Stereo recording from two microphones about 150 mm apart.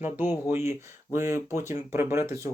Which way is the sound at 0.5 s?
15° right (ahead or behind).